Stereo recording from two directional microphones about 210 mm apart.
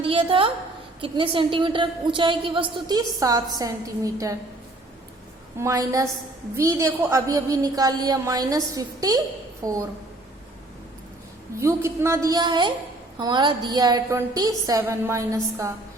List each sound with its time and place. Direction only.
0.0 s a woman's voice: 25° right (ahead or behind)
5.5 s a woman's voice: 15° right (ahead or behind)
11.6 s a woman's voice: 15° right (ahead or behind)